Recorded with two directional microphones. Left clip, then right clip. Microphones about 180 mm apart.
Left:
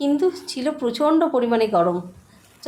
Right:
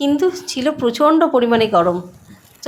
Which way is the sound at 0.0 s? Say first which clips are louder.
Right 4 dB; 15° right (ahead or behind).